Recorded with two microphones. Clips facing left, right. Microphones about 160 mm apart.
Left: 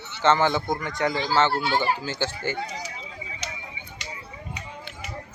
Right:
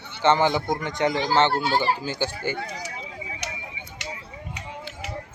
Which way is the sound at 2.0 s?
15° right (ahead or behind).